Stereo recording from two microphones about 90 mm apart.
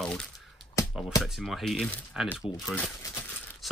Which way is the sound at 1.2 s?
Centre (ahead or behind).